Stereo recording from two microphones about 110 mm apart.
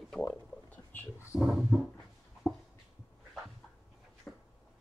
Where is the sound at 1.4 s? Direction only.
Centre (ahead or behind).